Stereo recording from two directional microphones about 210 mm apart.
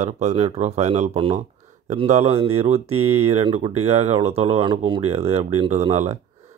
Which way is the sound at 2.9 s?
90° right.